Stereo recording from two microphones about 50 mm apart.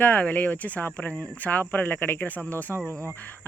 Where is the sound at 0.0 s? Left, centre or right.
Left.